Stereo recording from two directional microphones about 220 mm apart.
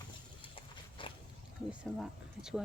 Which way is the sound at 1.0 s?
25° left (ahead or behind).